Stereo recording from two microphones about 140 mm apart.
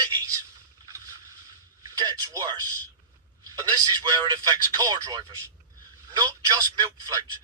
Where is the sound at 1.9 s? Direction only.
25° right (ahead or behind).